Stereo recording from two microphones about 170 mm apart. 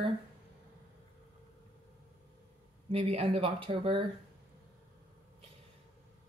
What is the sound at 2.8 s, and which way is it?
Speech, 35° right (ahead or behind).